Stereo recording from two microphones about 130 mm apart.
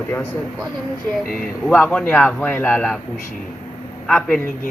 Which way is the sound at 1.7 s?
10° left (ahead or behind).